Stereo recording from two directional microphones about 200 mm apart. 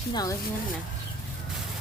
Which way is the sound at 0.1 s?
20° left (ahead or behind).